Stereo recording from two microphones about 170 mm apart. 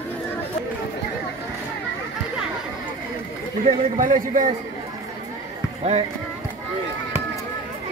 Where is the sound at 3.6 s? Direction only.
50° right (ahead or behind).